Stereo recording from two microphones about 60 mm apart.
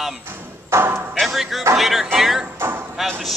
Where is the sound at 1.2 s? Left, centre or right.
Centre.